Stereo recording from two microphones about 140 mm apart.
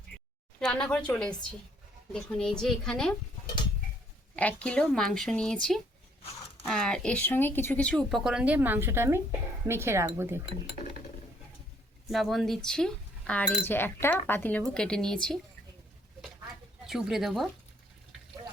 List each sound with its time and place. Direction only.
0.6 s a woman's voice: 5° left (ahead or behind)
4.4 s speech: 10° left (ahead or behind); by 10.4 s 20° right (ahead or behind)
10.8 s a sound: 65° left (ahead or behind)
12.1 s a woman's voice: centre (ahead or behind)
16.8 s speech: 5° right (ahead or behind)